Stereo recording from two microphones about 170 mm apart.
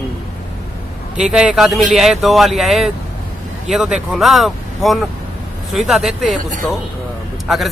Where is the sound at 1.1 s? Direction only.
5° right (ahead or behind).